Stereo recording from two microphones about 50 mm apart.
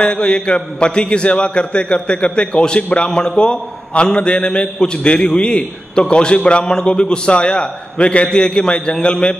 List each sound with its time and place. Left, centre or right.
0.0 s a man's voice: centre